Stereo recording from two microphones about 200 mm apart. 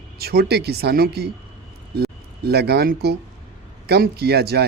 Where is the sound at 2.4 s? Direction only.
55° right (ahead or behind).